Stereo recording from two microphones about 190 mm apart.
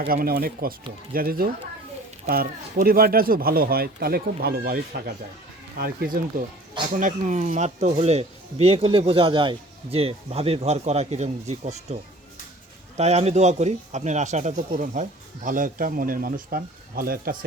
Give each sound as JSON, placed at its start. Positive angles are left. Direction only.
{"t": 0.1, "sound": "speech", "side_deg": -50}
{"t": 13.0, "sound": "speech", "side_deg": -35}